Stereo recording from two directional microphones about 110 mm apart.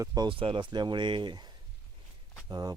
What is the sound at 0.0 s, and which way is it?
Speech, 35° right (ahead or behind).